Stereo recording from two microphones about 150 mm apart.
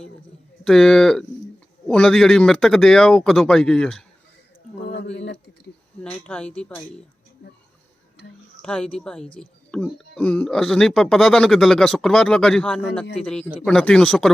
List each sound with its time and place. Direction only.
0.6 s speech: 5° left (ahead or behind)
4.7 s a sound: 45° left (ahead or behind)
6.0 s speech: 10° left (ahead or behind)
8.6 s speech: 5° left (ahead or behind)